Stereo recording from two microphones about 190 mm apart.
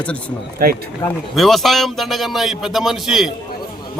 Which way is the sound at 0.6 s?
50° right (ahead or behind).